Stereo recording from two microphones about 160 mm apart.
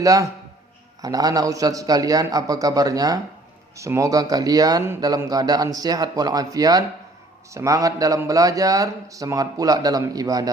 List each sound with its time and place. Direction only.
0.0 s speech: 20° right (ahead or behind)